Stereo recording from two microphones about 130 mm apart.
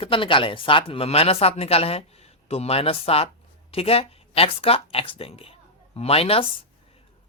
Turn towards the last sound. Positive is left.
turn(degrees=50)  # may be behind; listen again after turning